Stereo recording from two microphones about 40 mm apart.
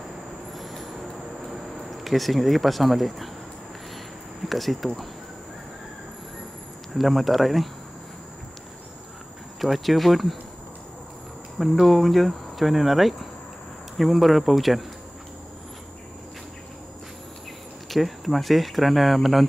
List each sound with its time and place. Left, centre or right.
0.5 s vehicle: centre
1.4 s speech: centre
4.5 s speech: centre
6.9 s speech: centre
9.6 s speech: centre
11.8 s speech: centre
17.8 s speech: centre